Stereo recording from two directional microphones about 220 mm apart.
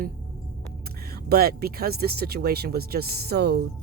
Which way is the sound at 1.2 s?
45° right (ahead or behind).